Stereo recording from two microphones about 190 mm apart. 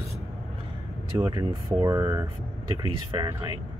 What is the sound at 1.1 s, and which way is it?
Speech, 20° right (ahead or behind).